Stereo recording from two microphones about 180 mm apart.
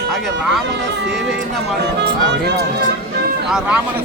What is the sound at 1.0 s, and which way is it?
Speech, 80° right.